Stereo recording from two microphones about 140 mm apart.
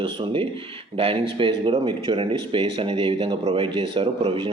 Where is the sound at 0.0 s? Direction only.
35° right (ahead or behind).